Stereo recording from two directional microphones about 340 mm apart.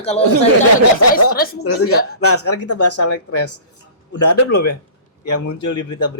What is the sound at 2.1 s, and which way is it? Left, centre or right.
Speech, left.